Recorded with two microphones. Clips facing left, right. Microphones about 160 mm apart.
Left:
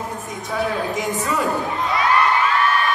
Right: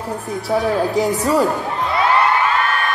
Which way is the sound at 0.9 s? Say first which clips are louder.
Right 6 dB; 35° right (ahead or behind).